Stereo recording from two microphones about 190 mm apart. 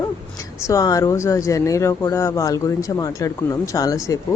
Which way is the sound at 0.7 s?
20° left (ahead or behind).